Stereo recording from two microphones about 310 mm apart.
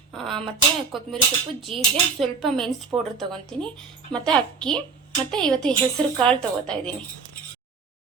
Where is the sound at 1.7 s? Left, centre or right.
Centre.